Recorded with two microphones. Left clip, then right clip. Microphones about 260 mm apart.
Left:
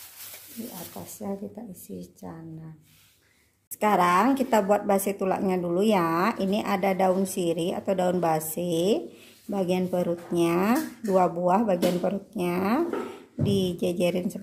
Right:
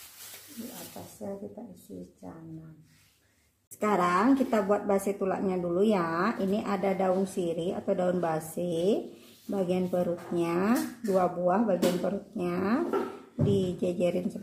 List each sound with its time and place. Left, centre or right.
1.0 s speech: left
3.8 s speech: left